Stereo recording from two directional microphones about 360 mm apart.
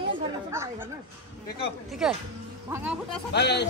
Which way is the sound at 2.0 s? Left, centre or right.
Centre.